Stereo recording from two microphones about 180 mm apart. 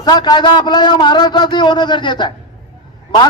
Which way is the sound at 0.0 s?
25° left (ahead or behind).